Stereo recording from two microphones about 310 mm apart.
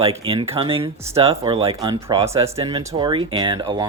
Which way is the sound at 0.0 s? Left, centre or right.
Centre.